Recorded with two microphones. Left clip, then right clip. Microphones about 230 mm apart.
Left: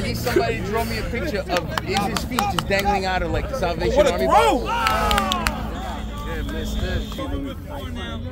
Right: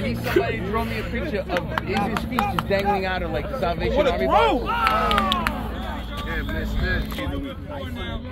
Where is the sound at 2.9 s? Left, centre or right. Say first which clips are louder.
Left 2 dB; left.